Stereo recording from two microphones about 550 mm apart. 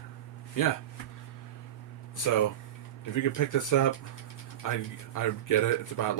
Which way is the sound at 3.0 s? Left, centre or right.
Left.